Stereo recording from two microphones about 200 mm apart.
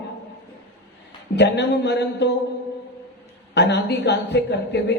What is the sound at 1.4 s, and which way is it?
Speech, 60° left (ahead or behind).